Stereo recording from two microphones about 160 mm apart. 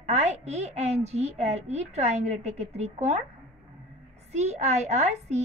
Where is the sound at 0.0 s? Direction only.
45° right (ahead or behind).